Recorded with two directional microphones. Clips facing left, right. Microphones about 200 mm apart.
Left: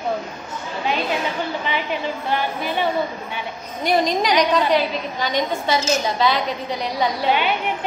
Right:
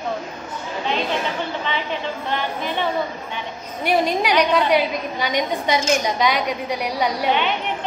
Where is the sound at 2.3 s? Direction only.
10° left (ahead or behind).